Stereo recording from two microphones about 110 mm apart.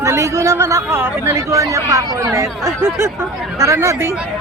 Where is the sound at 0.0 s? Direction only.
25° right (ahead or behind).